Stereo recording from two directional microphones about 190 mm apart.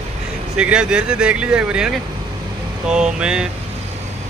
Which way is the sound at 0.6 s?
5° right (ahead or behind).